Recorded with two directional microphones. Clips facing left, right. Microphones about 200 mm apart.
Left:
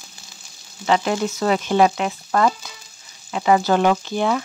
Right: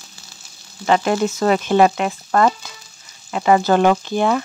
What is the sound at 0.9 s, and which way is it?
Speech, 50° right (ahead or behind).